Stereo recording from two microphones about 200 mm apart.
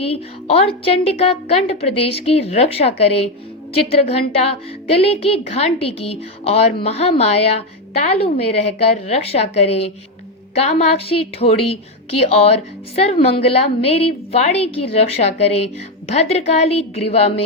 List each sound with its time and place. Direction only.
0.0 s a woman's voice: 30° left (ahead or behind)